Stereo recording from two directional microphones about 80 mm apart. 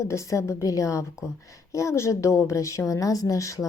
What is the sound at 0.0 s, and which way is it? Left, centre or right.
A woman's voice, left.